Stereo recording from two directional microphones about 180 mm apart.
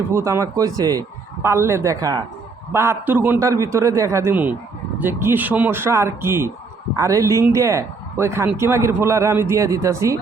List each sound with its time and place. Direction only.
0.1 s speech: 15° right (ahead or behind)